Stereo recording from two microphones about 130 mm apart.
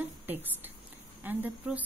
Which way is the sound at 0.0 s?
15° right (ahead or behind).